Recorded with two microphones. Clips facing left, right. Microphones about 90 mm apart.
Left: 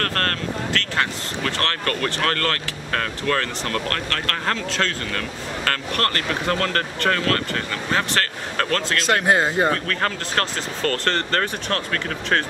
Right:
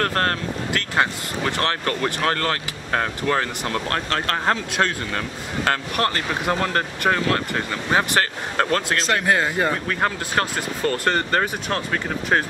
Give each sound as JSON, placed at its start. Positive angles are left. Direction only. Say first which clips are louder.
{"t": 0.0, "sound": "speech", "louder": "right 2 dB", "side_deg": -15}
{"t": 9.2, "sound": "speech", "louder": "left 2 dB", "side_deg": 20}
{"t": 9.7, "sound": "speech", "louder": "even", "side_deg": -10}